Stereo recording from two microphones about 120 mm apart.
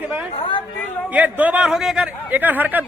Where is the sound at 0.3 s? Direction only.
45° left (ahead or behind).